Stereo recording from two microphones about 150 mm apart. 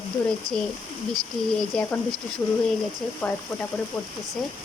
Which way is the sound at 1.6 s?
5° left (ahead or behind).